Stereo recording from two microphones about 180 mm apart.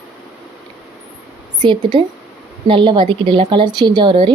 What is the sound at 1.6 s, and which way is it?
A woman's voice, 25° right (ahead or behind).